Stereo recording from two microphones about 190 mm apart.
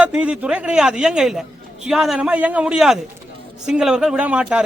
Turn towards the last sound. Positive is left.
turn(degrees=-5)  # may be behind; listen again after turning